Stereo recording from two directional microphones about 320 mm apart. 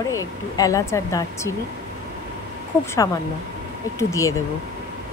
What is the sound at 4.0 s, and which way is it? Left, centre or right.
Speech, centre.